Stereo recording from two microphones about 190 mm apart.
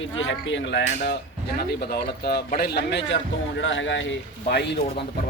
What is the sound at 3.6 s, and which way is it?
Speech, 85° left.